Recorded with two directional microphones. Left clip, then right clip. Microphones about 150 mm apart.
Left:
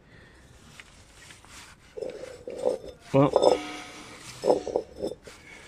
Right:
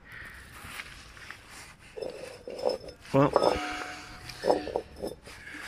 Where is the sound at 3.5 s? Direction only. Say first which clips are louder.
Left 5 dB; 25° left (ahead or behind).